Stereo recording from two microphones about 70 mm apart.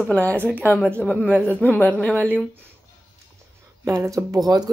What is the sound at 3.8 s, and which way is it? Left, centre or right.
Speech, right.